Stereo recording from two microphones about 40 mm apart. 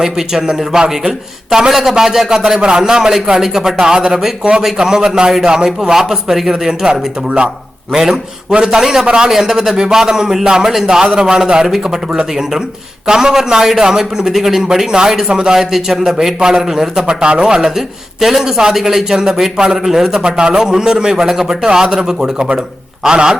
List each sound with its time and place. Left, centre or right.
0.0 s a man's voice: centre
8.4 s a man's voice: centre
9.3 s a man's voice: centre
15.5 s a man's voice: centre; by 17.4 s right
17.4 s a man's voice: centre